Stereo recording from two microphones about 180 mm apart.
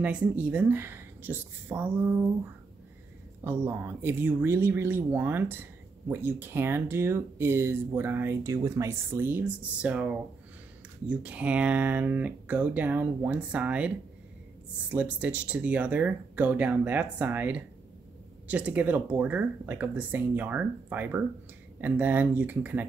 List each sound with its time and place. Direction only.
0.0 s speech: 5° right (ahead or behind)
3.4 s speech: 10° right (ahead or behind)